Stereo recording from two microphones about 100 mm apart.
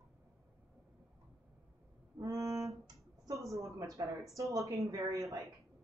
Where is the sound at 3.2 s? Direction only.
30° right (ahead or behind).